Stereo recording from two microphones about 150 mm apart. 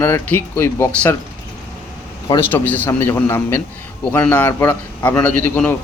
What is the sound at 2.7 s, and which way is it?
A man's voice, 10° left (ahead or behind).